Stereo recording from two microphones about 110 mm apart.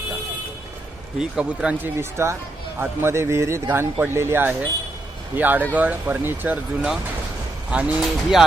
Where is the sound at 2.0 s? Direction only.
25° right (ahead or behind).